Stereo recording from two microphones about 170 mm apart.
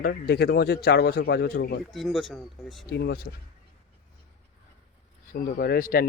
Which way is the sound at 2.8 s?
70° left (ahead or behind).